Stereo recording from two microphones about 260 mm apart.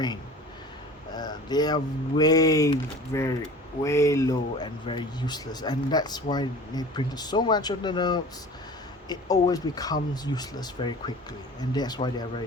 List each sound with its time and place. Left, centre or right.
1.1 s a man's voice: centre